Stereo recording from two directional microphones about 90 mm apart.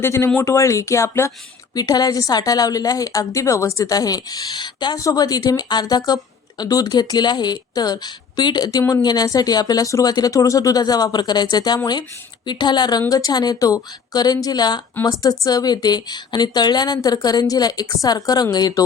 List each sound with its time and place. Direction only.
0.0 s speech: 30° left (ahead or behind)
1.7 s a woman's voice: 50° left (ahead or behind)
4.9 s a woman's voice: 45° left (ahead or behind)